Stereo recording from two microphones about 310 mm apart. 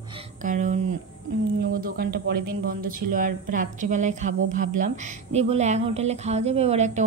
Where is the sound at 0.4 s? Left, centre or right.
Right.